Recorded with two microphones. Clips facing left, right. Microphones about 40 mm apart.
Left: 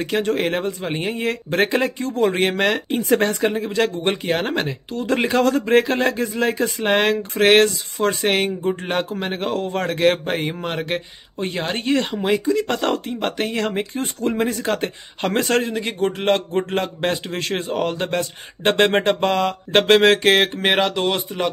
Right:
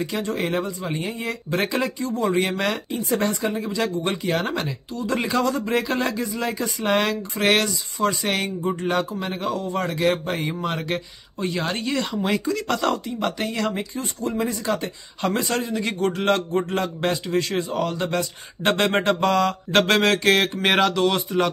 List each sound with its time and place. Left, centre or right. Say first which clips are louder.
0.0 s speech: left 5 dB; left
2.0 s a man's voice: left 2 dB; left
4.9 s a man's voice: left 4 dB; left
12.3 s speech: left 7 dB; centre
12.6 s a man's voice: left 1 dB; left
13.9 s speech: left 4 dB; left
15.8 s a sound: left 1 dB; left
16.3 s a man's voice: left 2 dB; left
19.0 s a sound: left 1 dB; left
20.6 s speech: even; centre